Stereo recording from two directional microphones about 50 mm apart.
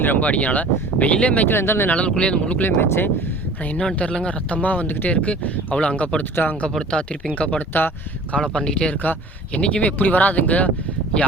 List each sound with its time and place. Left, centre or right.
0.0 s speech: left
1.5 s speech: left
1.9 s speech: left
2.6 s speech: left
3.8 s speech: left
6.3 s speech: left
6.9 s speech: left
7.7 s speech: left
8.4 s speech: centre
10.0 s speech: left